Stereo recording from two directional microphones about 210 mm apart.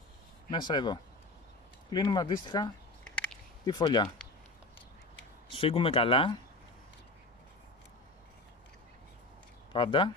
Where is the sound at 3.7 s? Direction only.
20° left (ahead or behind).